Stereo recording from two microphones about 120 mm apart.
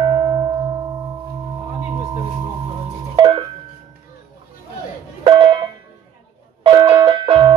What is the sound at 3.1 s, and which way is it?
Music, 50° right (ahead or behind).